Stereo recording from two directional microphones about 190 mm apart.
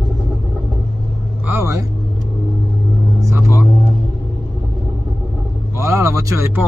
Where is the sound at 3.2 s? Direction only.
15° right (ahead or behind).